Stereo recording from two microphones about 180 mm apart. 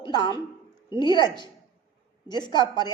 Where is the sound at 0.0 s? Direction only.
25° left (ahead or behind).